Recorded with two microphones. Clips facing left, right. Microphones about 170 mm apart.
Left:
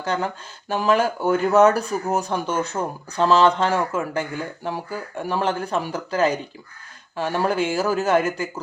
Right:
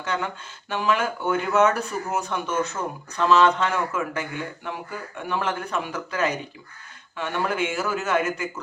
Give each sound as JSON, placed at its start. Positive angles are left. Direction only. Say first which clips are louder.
{"t": 0.0, "sound": "speech", "louder": "left 4 dB", "side_deg": 35}